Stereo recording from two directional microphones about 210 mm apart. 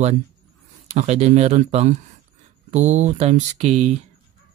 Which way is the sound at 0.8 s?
30° right (ahead or behind).